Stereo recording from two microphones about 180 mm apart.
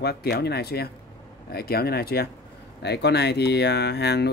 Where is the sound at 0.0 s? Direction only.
60° left (ahead or behind).